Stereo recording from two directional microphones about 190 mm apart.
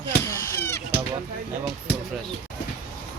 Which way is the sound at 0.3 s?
15° left (ahead or behind).